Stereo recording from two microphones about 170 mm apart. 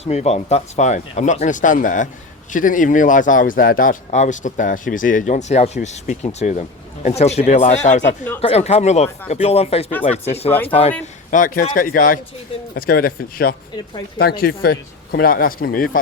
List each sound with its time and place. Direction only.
0.0 s a man's voice: 40° left (ahead or behind)
11.0 s a man's voice: 50° left (ahead or behind)